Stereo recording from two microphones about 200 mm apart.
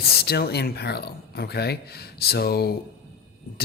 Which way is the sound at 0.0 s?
50° left (ahead or behind).